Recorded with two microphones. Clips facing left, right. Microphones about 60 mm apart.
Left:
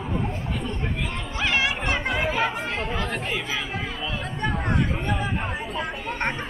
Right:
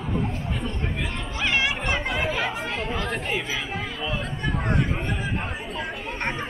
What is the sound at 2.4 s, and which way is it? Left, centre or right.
Speech, centre.